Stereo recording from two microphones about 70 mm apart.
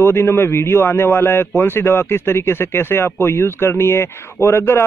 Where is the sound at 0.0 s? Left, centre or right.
Left.